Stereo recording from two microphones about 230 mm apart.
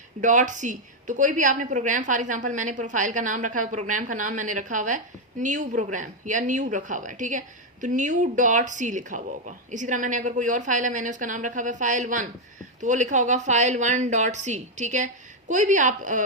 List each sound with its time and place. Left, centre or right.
0.2 s a woman's voice: right